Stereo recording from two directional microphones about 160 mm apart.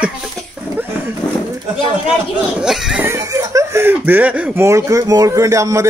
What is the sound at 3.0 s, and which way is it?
Speech, 20° right (ahead or behind).